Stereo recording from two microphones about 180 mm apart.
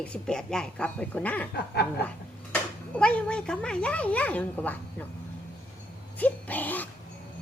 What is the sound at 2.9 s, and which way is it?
Speech, 5° left (ahead or behind).